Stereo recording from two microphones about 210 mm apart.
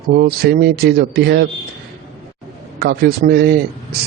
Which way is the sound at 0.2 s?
50° right (ahead or behind).